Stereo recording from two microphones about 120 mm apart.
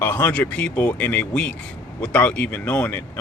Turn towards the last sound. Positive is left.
turn(degrees=15)  # may be behind; listen again after turning